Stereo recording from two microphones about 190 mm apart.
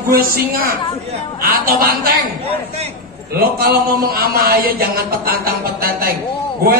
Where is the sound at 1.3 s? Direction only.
50° right (ahead or behind).